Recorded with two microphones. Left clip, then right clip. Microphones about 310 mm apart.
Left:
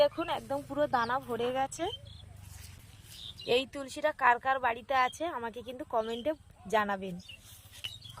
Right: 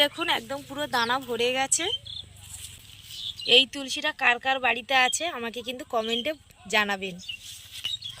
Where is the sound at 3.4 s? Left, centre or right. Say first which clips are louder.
Right 10 dB; centre.